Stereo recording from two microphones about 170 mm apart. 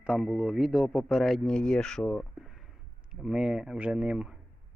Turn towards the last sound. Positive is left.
turn(degrees=-5)  # may be behind; listen again after turning